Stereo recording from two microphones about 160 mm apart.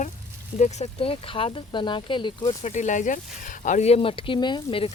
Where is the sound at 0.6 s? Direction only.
40° left (ahead or behind).